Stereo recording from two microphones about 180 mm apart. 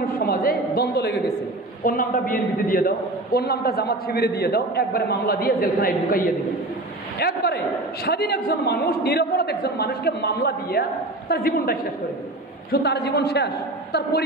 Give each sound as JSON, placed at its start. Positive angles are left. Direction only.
{"t": 0.0, "sound": "a sound", "side_deg": 55}
{"t": 1.9, "sound": "a man's voice", "side_deg": 50}
{"t": 12.7, "sound": "a man's voice", "side_deg": 65}